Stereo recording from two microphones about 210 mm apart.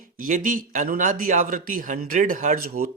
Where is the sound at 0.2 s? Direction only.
40° right (ahead or behind).